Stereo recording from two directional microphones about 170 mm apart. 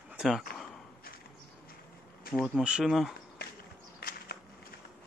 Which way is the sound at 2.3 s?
5° right (ahead or behind).